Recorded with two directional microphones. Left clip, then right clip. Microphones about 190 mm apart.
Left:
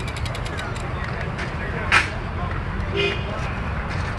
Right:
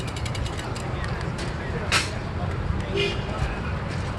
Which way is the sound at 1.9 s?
55° right (ahead or behind).